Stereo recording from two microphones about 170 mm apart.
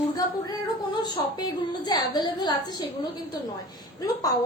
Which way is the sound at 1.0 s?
25° left (ahead or behind).